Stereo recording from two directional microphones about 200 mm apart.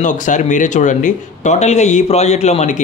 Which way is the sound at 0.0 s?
40° left (ahead or behind).